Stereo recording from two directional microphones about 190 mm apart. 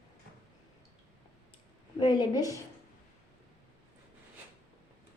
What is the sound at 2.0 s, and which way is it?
Speech, 20° left (ahead or behind).